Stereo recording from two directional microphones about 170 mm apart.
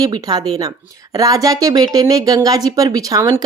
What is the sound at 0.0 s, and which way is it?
Speech, 25° right (ahead or behind).